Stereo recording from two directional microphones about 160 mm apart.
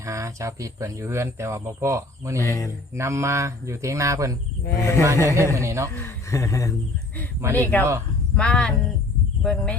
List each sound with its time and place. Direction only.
0.0 s speech: 20° right (ahead or behind)
2.4 s speech: 20° left (ahead or behind)
2.9 s speech: 15° right (ahead or behind)
4.8 s speech: 15° left (ahead or behind)
5.0 s a man's voice: 20° right (ahead or behind)
5.9 s speech: 15° left (ahead or behind)
7.4 s a man's voice: 20° right (ahead or behind)
8.4 s speech: 5° left (ahead or behind)